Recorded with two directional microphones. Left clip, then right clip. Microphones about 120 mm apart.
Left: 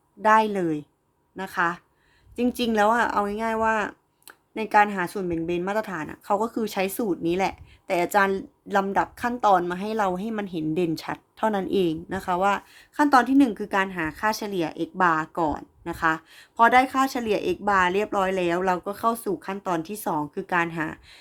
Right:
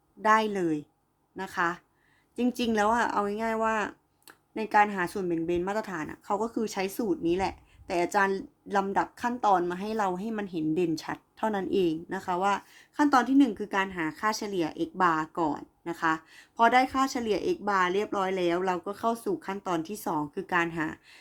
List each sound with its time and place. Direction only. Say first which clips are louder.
0.2 s speech: left 5 dB; 35° left (ahead or behind)